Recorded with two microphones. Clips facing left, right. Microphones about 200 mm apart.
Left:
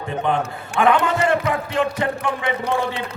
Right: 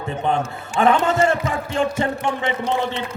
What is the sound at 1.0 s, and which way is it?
A man's voice, 25° right (ahead or behind).